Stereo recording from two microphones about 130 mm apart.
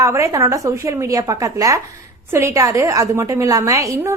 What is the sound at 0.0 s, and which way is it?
A woman's voice, 25° right (ahead or behind).